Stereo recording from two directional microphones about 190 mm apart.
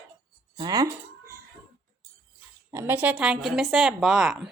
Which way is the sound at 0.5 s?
20° right (ahead or behind).